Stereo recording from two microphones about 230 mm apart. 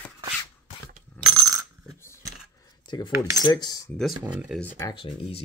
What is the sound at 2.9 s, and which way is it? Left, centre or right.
Cutlery, centre.